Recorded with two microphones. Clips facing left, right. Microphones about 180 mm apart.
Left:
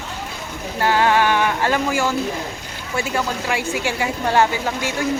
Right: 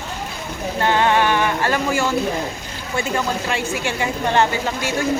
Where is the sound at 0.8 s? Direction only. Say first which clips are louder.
Even; 5° left (ahead or behind).